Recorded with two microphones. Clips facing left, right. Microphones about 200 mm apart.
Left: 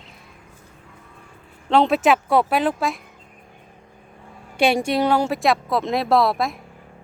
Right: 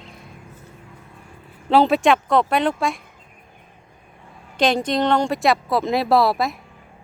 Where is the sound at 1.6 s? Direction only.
5° right (ahead or behind).